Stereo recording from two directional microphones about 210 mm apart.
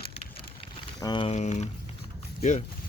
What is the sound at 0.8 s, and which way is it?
Speech, 20° left (ahead or behind).